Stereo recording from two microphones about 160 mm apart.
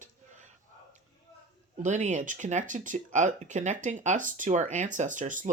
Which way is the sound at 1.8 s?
50° right (ahead or behind).